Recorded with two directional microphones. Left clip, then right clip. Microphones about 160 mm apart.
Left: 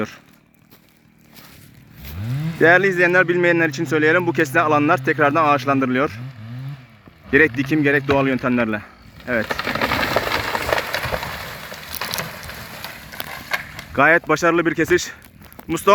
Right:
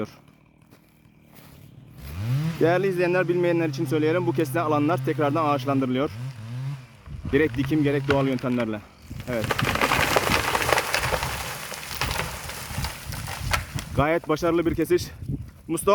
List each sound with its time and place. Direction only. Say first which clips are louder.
2.6 s speech: left 8 dB; centre (ahead or behind)
7.3 s speech: left 7 dB; centre (ahead or behind)
9.5 s a sound: left 2 dB; 35° right (ahead or behind)
11.9 s boat: left 2 dB; 35° right (ahead or behind)
13.1 s a sound: left 3 dB; 25° right (ahead or behind)
13.9 s speech: left 9 dB; centre (ahead or behind)